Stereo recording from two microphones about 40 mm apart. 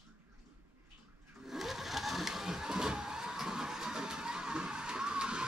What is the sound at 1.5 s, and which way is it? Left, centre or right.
Vehicle, centre.